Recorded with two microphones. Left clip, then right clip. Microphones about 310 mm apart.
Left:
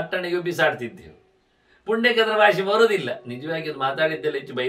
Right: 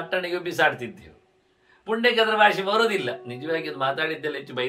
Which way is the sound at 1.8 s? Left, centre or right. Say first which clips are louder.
Left 1 dB; centre.